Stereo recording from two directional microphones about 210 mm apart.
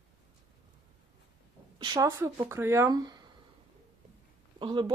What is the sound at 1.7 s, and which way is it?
Speech, 20° right (ahead or behind).